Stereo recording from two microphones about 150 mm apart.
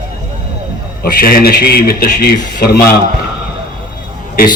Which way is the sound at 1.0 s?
75° left (ahead or behind).